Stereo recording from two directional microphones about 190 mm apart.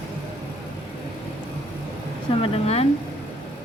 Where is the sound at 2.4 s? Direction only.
35° left (ahead or behind).